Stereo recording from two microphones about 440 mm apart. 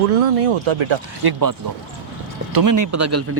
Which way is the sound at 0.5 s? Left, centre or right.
Right.